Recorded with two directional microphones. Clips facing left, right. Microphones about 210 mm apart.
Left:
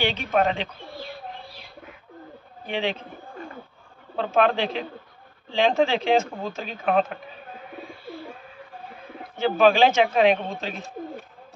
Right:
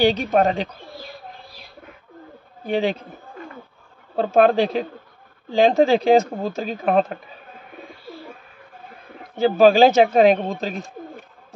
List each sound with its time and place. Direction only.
0.0 s speech: 40° right (ahead or behind)
2.6 s speech: 40° right (ahead or behind)
4.2 s speech: 40° right (ahead or behind)
9.4 s speech: 35° right (ahead or behind)